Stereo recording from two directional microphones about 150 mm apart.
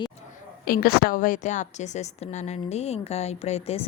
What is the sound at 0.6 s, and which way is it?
A woman's voice, 75° left (ahead or behind).